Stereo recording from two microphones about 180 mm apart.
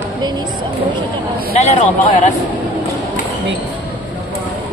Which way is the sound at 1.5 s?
40° left (ahead or behind).